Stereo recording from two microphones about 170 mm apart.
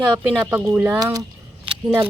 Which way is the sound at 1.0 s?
20° right (ahead or behind).